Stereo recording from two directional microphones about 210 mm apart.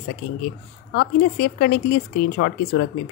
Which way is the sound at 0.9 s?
45° left (ahead or behind).